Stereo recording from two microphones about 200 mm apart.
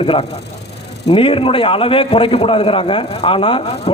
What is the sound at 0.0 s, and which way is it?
A man's voice, 30° left (ahead or behind).